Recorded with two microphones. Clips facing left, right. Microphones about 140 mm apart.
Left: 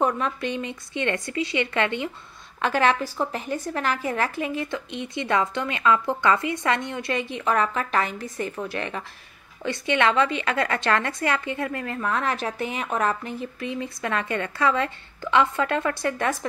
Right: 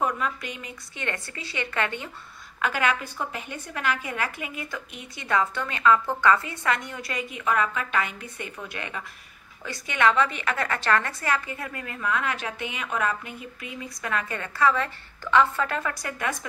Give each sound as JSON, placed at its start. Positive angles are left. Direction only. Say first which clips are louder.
{"t": 0.0, "sound": "a woman's voice", "louder": "left 4 dB", "side_deg": 30}
{"t": 2.6, "sound": "a woman's voice", "louder": "left 4 dB", "side_deg": 35}